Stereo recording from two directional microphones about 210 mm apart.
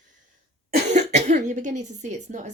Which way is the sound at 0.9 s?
35° right (ahead or behind).